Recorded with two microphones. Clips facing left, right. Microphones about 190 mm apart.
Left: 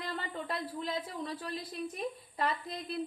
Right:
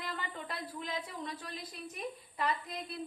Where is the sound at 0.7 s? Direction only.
35° left (ahead or behind).